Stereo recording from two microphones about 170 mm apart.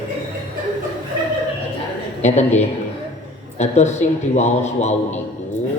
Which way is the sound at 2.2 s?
40° left (ahead or behind).